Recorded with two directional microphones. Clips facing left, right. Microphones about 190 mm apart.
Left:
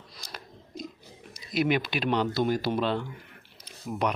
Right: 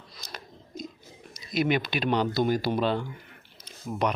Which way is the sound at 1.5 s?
5° left (ahead or behind).